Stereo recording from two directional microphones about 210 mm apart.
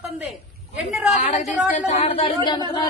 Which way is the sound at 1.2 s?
35° left (ahead or behind).